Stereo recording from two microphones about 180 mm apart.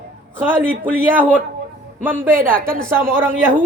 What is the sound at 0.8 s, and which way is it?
A man's voice, 10° right (ahead or behind).